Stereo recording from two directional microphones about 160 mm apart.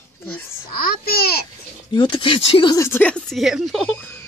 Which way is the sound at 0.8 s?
70° left (ahead or behind).